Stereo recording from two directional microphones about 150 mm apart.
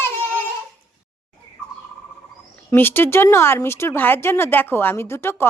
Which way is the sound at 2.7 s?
15° left (ahead or behind).